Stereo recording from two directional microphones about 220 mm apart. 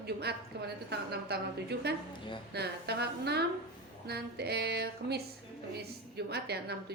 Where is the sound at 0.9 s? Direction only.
45° right (ahead or behind).